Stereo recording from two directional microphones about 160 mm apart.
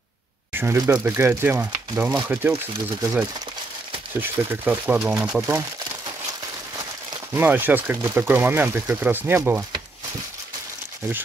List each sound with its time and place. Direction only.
0.5 s speech: 15° right (ahead or behind)
7.3 s speech: 10° right (ahead or behind)